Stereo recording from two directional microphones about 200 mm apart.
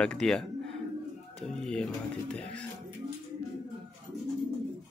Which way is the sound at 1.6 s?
5° left (ahead or behind).